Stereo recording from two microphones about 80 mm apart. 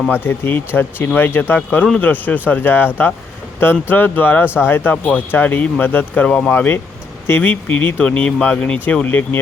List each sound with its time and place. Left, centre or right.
0.1 s speech: left
1.5 s speech: centre
7.3 s speech: left